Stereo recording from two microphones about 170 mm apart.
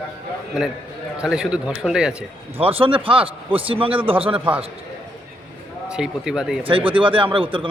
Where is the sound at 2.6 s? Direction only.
35° right (ahead or behind).